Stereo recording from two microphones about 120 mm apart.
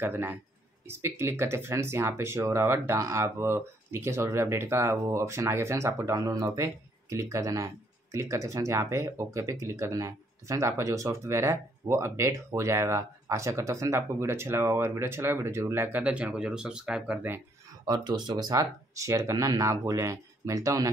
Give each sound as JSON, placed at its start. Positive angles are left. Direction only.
{"t": 0.0, "sound": "a man's voice", "side_deg": -15}
{"t": 17.8, "sound": "speech", "side_deg": -35}